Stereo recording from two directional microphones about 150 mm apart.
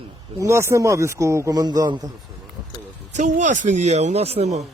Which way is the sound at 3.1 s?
55° right (ahead or behind).